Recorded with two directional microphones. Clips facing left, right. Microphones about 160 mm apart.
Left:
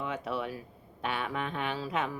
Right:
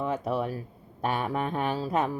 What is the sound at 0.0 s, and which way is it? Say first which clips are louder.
Speech: right 6 dB; 40° right (ahead or behind).